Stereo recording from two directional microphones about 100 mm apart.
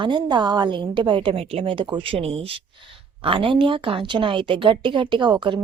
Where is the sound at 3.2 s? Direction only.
65° right (ahead or behind).